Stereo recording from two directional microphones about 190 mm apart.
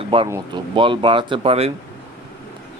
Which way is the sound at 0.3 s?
15° right (ahead or behind).